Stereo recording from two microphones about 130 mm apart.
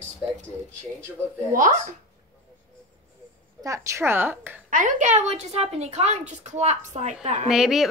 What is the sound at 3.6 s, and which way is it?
Speech, 25° right (ahead or behind).